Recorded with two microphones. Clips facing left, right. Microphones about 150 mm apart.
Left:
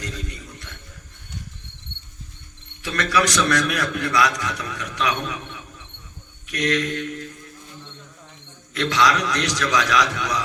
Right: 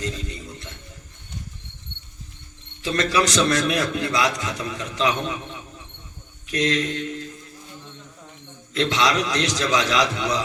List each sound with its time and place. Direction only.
0.0 s a sound: 25° right (ahead or behind)
2.8 s a man's voice: 30° right (ahead or behind)
8.7 s a man's voice: 25° right (ahead or behind)